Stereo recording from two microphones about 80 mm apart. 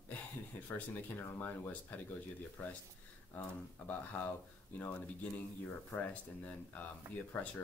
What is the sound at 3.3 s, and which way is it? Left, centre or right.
Speech, left.